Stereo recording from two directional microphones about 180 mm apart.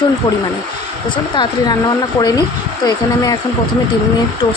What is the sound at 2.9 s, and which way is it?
Speech, 20° left (ahead or behind).